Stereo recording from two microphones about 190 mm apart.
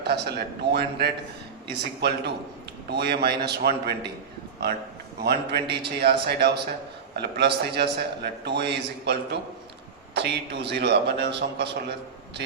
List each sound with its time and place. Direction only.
0.0 s a man's voice: 60° right (ahead or behind)
5.2 s a man's voice: 60° right (ahead or behind)